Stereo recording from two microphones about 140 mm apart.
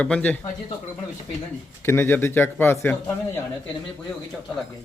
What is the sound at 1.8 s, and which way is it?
Speech, 15° left (ahead or behind).